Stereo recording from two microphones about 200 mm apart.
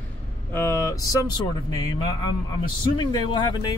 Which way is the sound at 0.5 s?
15° left (ahead or behind).